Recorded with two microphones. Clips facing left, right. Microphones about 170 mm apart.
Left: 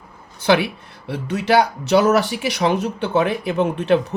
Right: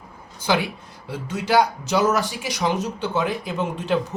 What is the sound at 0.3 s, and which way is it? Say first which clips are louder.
Speech: left 5 dB; 65° left (ahead or behind).